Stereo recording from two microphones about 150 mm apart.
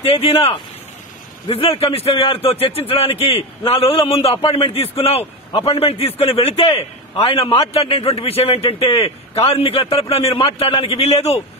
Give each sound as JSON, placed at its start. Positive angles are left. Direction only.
{"t": 1.5, "sound": "a man's voice", "side_deg": 40}
{"t": 11.0, "sound": "a man's voice", "side_deg": 45}